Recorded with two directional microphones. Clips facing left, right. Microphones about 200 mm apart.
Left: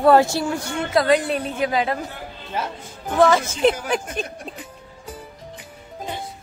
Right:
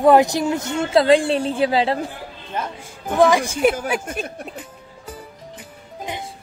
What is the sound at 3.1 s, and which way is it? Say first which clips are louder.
Speech: right 1 dB; 15° right (ahead or behind).